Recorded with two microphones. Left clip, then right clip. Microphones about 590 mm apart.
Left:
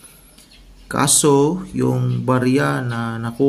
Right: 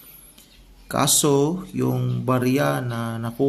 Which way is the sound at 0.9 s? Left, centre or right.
Right.